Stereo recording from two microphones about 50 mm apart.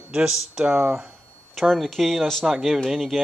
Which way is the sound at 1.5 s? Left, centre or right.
Centre.